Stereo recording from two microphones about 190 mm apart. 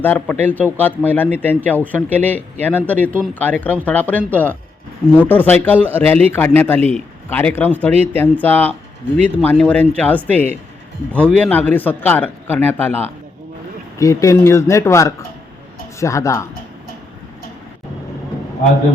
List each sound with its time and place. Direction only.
0.0 s a man's voice: 10° left (ahead or behind)